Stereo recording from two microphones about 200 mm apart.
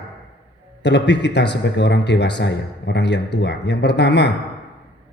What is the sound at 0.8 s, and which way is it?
Speech, 60° left (ahead or behind).